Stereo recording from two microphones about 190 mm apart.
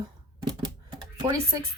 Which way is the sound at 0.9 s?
25° right (ahead or behind).